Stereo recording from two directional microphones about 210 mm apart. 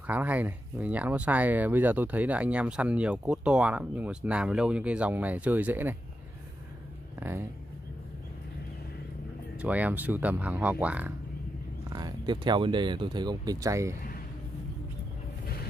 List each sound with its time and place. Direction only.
0.0 s speech: 10° right (ahead or behind)
7.2 s speech: 10° right (ahead or behind)
9.6 s speech: 5° right (ahead or behind)
11.9 s speech: 20° right (ahead or behind)